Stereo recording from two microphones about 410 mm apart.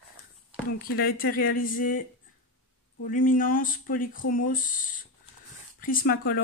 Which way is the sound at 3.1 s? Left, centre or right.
Centre.